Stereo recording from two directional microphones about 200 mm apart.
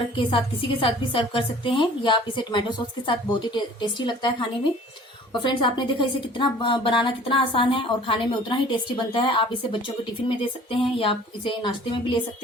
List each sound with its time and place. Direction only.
0.2 s speech: 25° left (ahead or behind)